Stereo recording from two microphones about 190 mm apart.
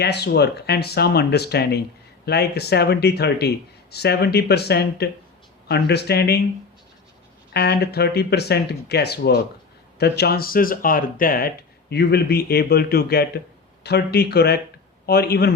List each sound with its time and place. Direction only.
0.0 s speech: 60° left (ahead or behind)
7.5 s speech: 60° left (ahead or behind)